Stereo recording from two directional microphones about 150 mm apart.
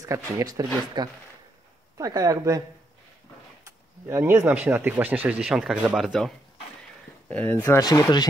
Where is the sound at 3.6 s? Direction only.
15° right (ahead or behind); by 6.3 s centre (ahead or behind).